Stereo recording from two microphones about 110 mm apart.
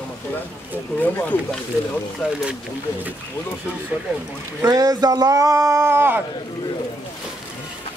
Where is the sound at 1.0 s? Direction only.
15° left (ahead or behind).